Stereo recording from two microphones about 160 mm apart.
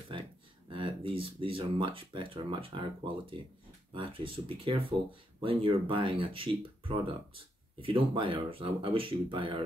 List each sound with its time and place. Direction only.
0.7 s speech: 35° right (ahead or behind)